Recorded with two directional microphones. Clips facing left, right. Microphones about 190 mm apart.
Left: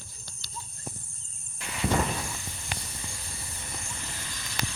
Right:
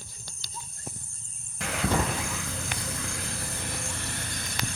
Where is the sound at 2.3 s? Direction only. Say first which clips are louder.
Right 5 dB; 90° right.